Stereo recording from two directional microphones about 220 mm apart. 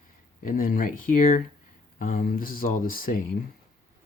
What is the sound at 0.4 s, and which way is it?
Speech, 40° left (ahead or behind).